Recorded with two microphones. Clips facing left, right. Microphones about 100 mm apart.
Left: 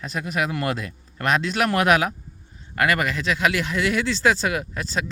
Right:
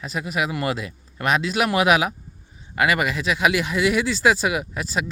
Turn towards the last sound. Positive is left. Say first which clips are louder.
# right 1 dB
turn(degrees=-5)  # may be behind; listen again after turning